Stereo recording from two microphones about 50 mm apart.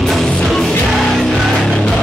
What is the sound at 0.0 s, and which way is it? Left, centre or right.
Music, centre.